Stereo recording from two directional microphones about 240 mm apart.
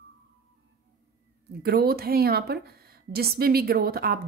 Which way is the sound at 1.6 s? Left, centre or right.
Right.